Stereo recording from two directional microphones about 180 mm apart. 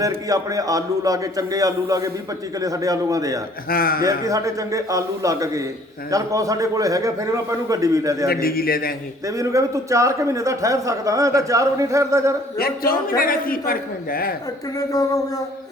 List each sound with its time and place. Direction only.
0.0 s a man's voice: 20° right (ahead or behind)
3.7 s a man's voice: 55° left (ahead or behind)
4.0 s a man's voice: 20° right (ahead or behind)
8.3 s a man's voice: 55° left (ahead or behind)
9.2 s a man's voice: 20° right (ahead or behind)
12.5 s a man's voice: 55° left (ahead or behind)
14.8 s speech: 20° left (ahead or behind)